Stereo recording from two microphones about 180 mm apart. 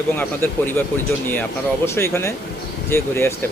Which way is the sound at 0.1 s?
10° left (ahead or behind).